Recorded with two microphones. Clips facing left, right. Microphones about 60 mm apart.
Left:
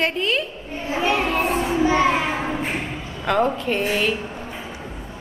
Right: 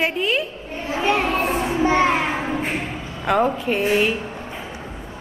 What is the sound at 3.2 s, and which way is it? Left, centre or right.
Speech, centre.